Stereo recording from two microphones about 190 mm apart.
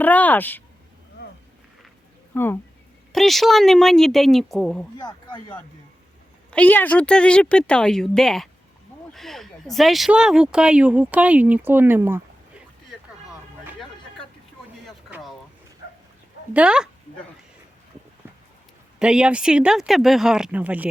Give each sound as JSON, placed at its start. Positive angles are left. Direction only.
{"t": 0.0, "sound": "a sound", "side_deg": 10}
{"t": 1.2, "sound": "wild animals", "side_deg": 60}
{"t": 2.3, "sound": "speech", "side_deg": 10}
{"t": 4.9, "sound": "speech", "side_deg": 20}
{"t": 6.5, "sound": "speech", "side_deg": 10}
{"t": 14.8, "sound": "a sound", "side_deg": 0}
{"t": 16.6, "sound": "speech", "side_deg": -5}
{"t": 18.9, "sound": "speech", "side_deg": -5}